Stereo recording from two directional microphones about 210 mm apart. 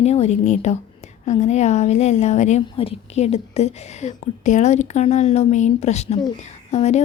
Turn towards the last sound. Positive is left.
turn(degrees=30)  # may be behind; listen again after turning